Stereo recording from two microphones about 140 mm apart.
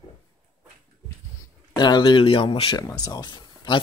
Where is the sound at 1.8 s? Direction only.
30° left (ahead or behind).